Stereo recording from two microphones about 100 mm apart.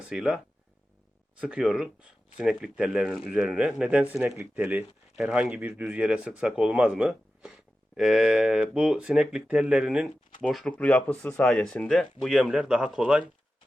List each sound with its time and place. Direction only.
0.0 s speech: 10° right (ahead or behind)
1.4 s a man's voice: 10° right (ahead or behind)
10.7 s speech: 15° left (ahead or behind); by 13.2 s 10° right (ahead or behind)